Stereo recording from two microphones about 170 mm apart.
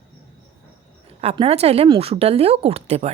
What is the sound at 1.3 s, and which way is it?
A woman's voice, 35° right (ahead or behind).